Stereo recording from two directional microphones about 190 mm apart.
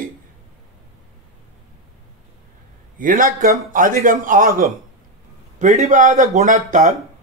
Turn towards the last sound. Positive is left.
turn(degrees=-40)  # may be behind; listen again after turning